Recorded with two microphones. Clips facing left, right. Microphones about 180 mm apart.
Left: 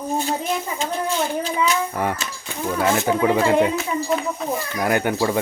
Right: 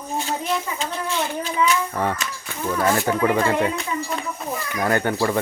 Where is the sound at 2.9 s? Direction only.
15° left (ahead or behind).